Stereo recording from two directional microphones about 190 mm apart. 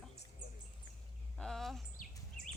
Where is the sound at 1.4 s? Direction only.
Centre (ahead or behind).